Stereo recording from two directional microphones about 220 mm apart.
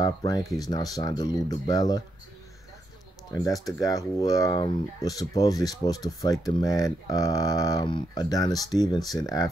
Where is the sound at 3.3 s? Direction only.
15° left (ahead or behind).